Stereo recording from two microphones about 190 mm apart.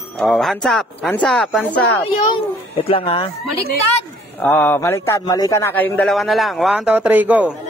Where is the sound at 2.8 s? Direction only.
30° left (ahead or behind).